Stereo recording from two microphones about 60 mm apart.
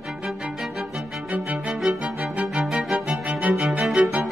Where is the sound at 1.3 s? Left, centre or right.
Right.